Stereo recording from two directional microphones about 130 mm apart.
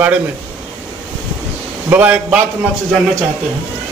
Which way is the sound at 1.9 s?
10° right (ahead or behind).